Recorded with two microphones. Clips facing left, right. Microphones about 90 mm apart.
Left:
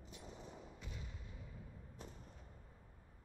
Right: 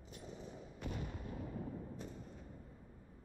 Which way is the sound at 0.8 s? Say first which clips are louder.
Right 9 dB; 60° right (ahead or behind).